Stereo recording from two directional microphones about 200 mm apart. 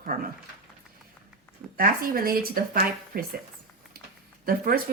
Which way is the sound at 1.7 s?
45° right (ahead or behind).